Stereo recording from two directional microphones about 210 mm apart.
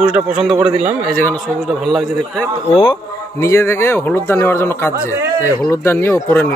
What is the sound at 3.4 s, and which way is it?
A man's voice, 15° left (ahead or behind).